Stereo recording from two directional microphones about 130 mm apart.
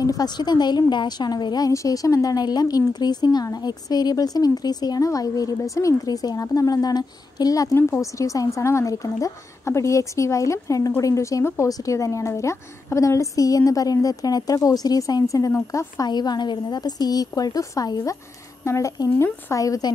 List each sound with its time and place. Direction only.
0.0 s a woman's voice: 30° left (ahead or behind)